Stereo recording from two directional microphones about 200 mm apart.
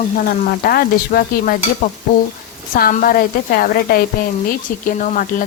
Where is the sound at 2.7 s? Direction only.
45° left (ahead or behind).